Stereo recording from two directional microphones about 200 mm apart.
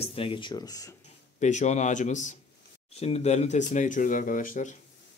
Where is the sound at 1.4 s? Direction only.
35° left (ahead or behind).